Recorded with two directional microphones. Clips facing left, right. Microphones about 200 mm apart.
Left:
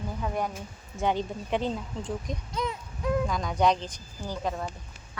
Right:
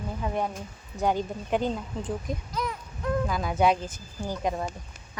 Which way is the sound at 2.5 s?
25° left (ahead or behind).